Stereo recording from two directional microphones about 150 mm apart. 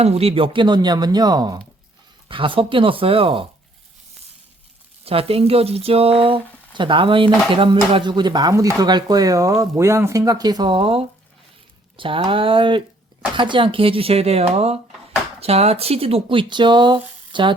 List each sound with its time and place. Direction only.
0.0 s speech: 40° right (ahead or behind)
5.0 s speech: 40° right (ahead or behind)